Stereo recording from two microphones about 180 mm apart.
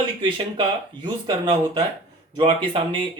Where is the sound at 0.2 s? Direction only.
25° right (ahead or behind).